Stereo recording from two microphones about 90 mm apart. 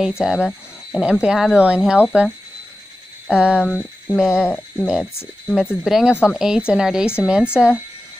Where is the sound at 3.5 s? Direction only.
20° left (ahead or behind).